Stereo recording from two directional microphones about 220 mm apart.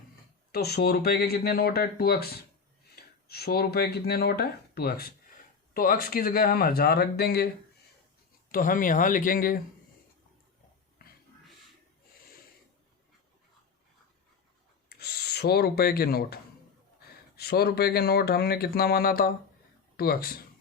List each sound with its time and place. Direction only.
0.5 s speech: 45° left (ahead or behind)
8.5 s speech: 40° left (ahead or behind)
14.8 s speech: 45° left (ahead or behind)